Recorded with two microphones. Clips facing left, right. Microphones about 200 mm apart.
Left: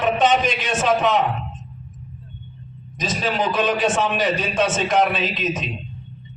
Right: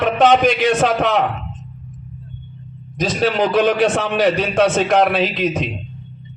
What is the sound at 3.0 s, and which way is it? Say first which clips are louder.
A man's voice: right 6 dB; 65° right (ahead or behind).